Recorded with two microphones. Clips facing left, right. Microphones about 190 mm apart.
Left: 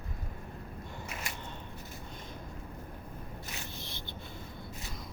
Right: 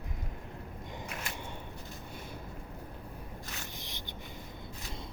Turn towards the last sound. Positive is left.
turn(degrees=-15)  # may be behind; listen again after turning